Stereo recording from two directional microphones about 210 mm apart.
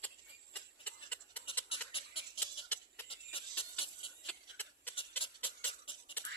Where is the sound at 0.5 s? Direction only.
5° left (ahead or behind).